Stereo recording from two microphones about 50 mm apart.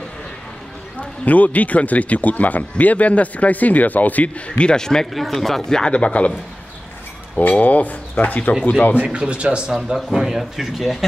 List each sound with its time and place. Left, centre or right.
0.9 s speech: left
4.6 s speech: centre
5.1 s speech: centre
5.9 s speech: left
7.3 s speech: left
8.9 s speech: right
9.9 s speech: centre